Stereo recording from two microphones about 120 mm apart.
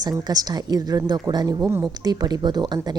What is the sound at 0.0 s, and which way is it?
Speech, 35° right (ahead or behind).